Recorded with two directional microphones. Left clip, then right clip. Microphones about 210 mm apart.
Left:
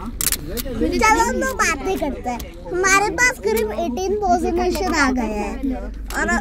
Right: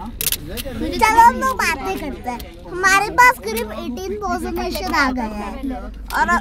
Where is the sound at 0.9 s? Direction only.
10° right (ahead or behind).